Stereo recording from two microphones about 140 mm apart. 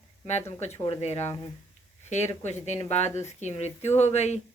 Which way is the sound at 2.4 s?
55° left (ahead or behind).